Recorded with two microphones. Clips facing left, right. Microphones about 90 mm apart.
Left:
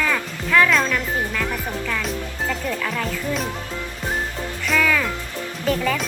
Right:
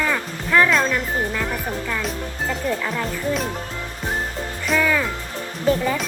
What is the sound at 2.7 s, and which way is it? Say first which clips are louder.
Speech: right 1 dB; 20° right (ahead or behind).